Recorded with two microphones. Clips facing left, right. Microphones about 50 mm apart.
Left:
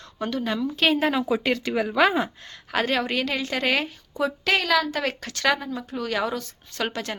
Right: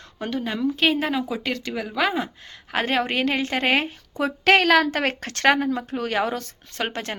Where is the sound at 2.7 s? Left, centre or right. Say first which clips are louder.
Right 1 dB; right.